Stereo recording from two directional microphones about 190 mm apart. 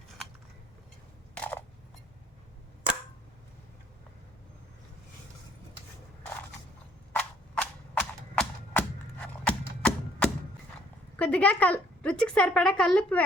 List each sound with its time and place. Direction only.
1.4 s a sound: 10° left (ahead or behind)
7.1 s cap gun: 5° left (ahead or behind)
11.2 s a woman's voice: 5° left (ahead or behind)